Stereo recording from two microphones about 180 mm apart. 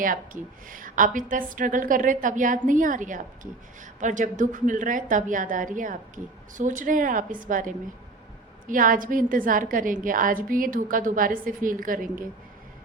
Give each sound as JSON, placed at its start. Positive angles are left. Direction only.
{"t": 0.7, "sound": "a woman's voice", "side_deg": -50}